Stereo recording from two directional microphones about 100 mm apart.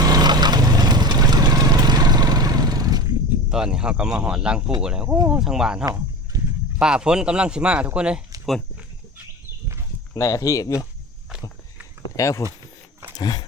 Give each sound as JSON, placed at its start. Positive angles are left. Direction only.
{"t": 0.0, "sound": "vehicle", "side_deg": -40}
{"t": 3.5, "sound": "speech", "side_deg": -5}
{"t": 6.3, "sound": "a sound", "side_deg": -35}
{"t": 6.7, "sound": "speech", "side_deg": -10}
{"t": 10.2, "sound": "speech", "side_deg": 35}
{"t": 12.0, "sound": "speech", "side_deg": 35}
{"t": 13.1, "sound": "a sound", "side_deg": 40}